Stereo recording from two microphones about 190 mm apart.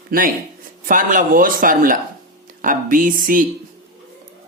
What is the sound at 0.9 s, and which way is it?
Speech, 45° right (ahead or behind).